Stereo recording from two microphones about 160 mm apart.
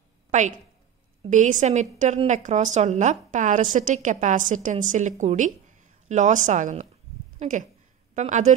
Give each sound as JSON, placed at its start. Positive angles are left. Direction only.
{"t": 0.3, "sound": "a woman's voice", "side_deg": -50}